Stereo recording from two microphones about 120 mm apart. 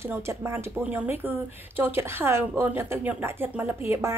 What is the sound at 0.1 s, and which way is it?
A woman's voice, 20° right (ahead or behind).